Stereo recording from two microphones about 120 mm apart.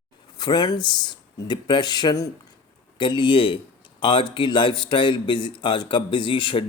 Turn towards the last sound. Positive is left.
turn(degrees=45)  # may be behind; listen again after turning